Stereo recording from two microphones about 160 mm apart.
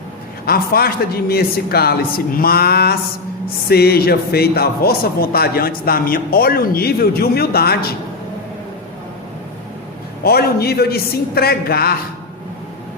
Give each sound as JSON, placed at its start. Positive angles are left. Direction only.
{"t": 0.4, "sound": "speech", "side_deg": 70}
{"t": 10.2, "sound": "speech", "side_deg": 80}